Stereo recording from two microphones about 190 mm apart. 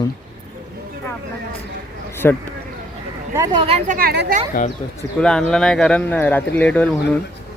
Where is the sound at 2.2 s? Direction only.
10° left (ahead or behind).